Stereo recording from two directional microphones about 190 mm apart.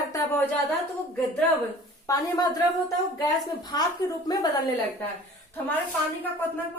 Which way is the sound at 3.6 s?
20° left (ahead or behind).